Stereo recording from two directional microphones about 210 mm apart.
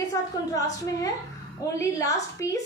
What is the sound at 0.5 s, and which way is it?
A woman's voice, 15° left (ahead or behind).